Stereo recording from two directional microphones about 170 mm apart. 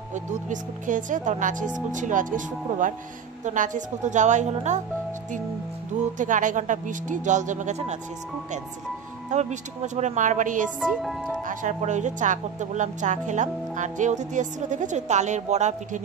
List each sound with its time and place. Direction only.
0.1 s speech: 45° right (ahead or behind)
6.1 s speech: 50° right (ahead or behind)
9.3 s speech: 40° right (ahead or behind)
10.8 s speech: centre (ahead or behind)
11.4 s speech: 45° right (ahead or behind)